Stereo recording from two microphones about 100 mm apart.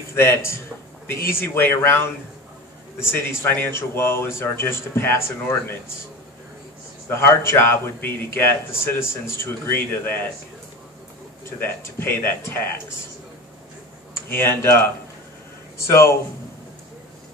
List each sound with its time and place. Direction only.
0.1 s speech: 25° left (ahead or behind)
7.1 s speech: 25° left (ahead or behind)
11.6 s speech: 20° left (ahead or behind)
14.3 s speech: 20° left (ahead or behind)